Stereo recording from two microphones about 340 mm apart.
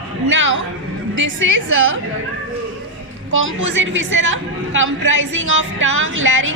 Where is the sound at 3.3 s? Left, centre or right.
Right.